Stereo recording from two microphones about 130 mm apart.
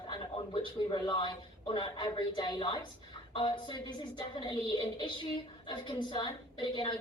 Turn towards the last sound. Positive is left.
turn(degrees=40)  # may be behind; listen again after turning